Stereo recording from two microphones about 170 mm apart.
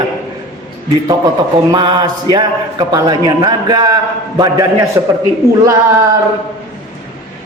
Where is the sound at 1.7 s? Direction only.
25° right (ahead or behind).